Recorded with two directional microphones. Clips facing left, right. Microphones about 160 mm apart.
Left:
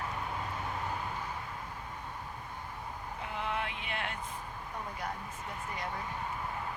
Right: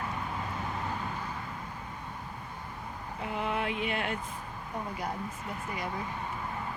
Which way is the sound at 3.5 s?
10° right (ahead or behind).